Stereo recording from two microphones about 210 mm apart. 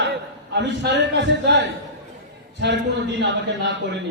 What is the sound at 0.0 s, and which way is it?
A man's voice, 55° right (ahead or behind).